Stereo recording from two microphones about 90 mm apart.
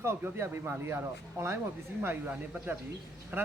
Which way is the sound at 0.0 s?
30° right (ahead or behind).